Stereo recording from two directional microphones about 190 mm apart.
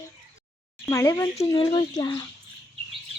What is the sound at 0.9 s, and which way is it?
Speech, 15° left (ahead or behind).